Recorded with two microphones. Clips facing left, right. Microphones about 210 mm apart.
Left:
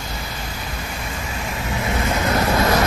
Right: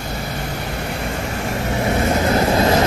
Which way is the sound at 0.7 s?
65° right (ahead or behind).